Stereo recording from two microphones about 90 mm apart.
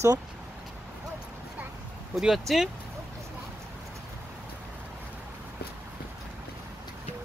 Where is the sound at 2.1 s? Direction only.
5° right (ahead or behind).